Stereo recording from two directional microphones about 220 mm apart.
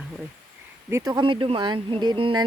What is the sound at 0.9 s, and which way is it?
Speech, 20° right (ahead or behind).